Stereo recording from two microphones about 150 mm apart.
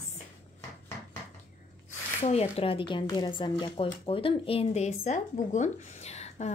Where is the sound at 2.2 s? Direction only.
40° left (ahead or behind).